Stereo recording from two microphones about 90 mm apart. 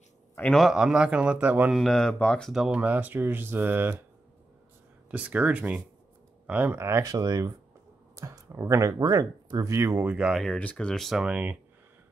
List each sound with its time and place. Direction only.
0.6 s a man's voice: 5° right (ahead or behind)
1.7 s speech: 5° left (ahead or behind)
2.5 s speech: 10° right (ahead or behind)
5.1 s a man's voice: 15° right (ahead or behind)
7.0 s speech: 40° right (ahead or behind)
8.2 s a sound: 40° right (ahead or behind)
8.5 s speech: 30° right (ahead or behind)
9.0 s speech: 45° right (ahead or behind)
10.1 s a man's voice: 5° right (ahead or behind)
10.6 s speech: 15° left (ahead or behind)
11.2 s a man's voice: 15° right (ahead or behind)